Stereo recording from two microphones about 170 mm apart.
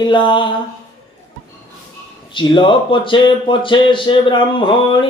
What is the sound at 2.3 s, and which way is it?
Speech, 30° left (ahead or behind).